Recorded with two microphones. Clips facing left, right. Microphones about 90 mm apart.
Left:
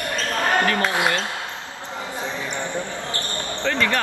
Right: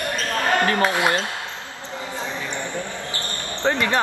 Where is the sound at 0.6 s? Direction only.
25° right (ahead or behind).